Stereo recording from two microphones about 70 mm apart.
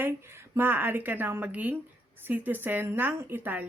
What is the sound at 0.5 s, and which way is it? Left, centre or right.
Speech, right.